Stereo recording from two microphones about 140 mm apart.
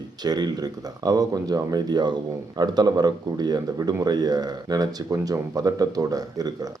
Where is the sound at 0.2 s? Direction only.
30° right (ahead or behind).